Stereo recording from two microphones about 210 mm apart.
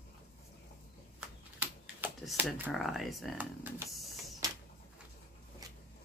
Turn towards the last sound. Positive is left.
turn(degrees=-10)  # may be behind; listen again after turning